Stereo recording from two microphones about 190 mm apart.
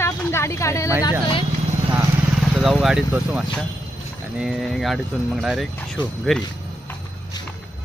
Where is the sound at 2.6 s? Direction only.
Centre (ahead or behind).